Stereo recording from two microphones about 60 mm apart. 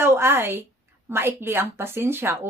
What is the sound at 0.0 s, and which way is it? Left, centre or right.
A woman's voice, right.